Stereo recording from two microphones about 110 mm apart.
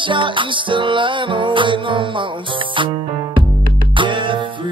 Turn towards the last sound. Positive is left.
turn(degrees=-50)  # may be behind; listen again after turning